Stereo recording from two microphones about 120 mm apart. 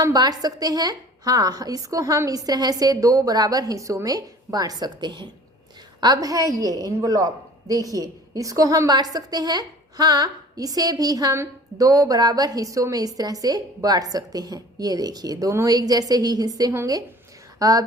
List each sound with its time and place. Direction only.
0.0 s a woman's voice: 35° right (ahead or behind)